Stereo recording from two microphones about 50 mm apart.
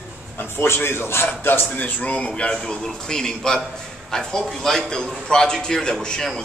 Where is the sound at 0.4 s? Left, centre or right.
Left.